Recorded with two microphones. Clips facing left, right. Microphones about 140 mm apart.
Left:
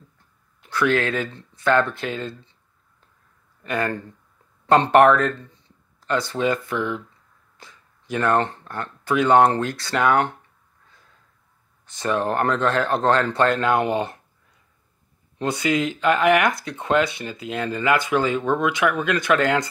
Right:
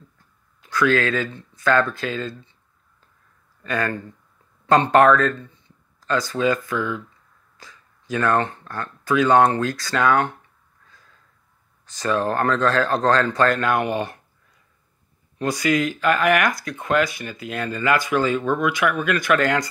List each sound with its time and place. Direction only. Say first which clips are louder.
0.6 s speech: right 1 dB; 25° left (ahead or behind)
3.6 s speech: even; 20° left (ahead or behind)
11.8 s speech: right 1 dB; 25° left (ahead or behind)
15.3 s speech: right 1 dB; 25° left (ahead or behind)